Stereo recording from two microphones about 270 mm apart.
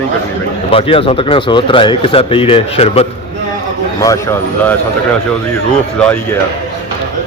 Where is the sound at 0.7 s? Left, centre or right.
Left.